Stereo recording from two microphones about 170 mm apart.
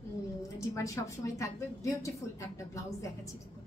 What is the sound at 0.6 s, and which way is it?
A woman's voice, 20° left (ahead or behind).